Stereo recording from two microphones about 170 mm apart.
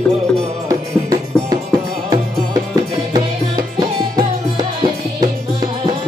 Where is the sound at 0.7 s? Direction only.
20° right (ahead or behind).